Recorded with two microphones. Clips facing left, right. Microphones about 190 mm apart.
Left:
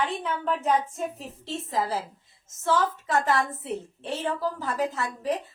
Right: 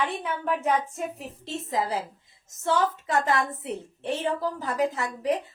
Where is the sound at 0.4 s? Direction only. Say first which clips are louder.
Even; 10° right (ahead or behind).